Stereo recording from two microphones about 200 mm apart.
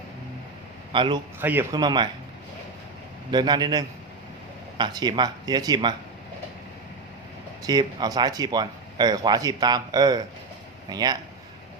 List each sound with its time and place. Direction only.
0.9 s speech: 20° right (ahead or behind)
1.4 s speech: 10° right (ahead or behind)
1.8 s speech: 20° right (ahead or behind)
3.3 s speech: 20° right (ahead or behind)
7.6 s speech: 20° right (ahead or behind)